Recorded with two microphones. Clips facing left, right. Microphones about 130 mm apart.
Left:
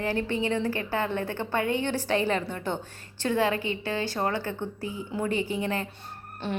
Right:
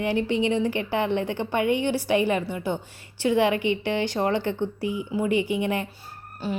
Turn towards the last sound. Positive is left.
turn(degrees=-5)  # may be behind; listen again after turning